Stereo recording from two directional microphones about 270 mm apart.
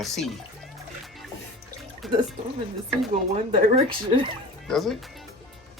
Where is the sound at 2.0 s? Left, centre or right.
Centre.